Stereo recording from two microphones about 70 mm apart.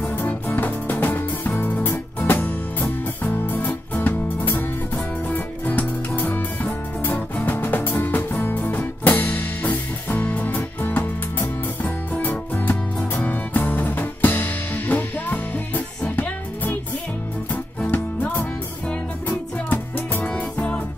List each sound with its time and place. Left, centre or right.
0.0 s music: left
17.9 s music: left